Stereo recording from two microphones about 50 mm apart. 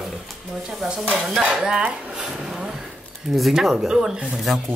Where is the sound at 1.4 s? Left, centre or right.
Centre.